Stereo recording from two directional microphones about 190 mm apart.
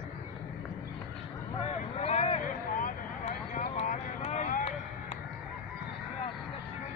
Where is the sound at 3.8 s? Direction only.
35° left (ahead or behind).